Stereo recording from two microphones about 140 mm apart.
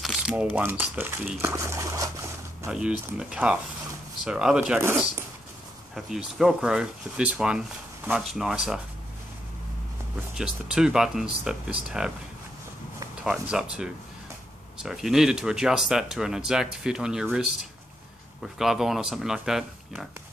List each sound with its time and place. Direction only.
0.0 s speech: 5° right (ahead or behind); by 2.0 s 25° right (ahead or behind)
2.7 s speech: 5° right (ahead or behind)
5.9 s speech: centre (ahead or behind)
10.3 s speech: 5° right (ahead or behind)
13.2 s speech: 5° right (ahead or behind)